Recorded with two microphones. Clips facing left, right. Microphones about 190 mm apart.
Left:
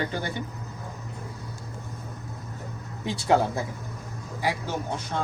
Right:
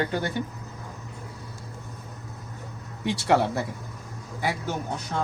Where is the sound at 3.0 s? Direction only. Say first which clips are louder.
Even; 70° right (ahead or behind).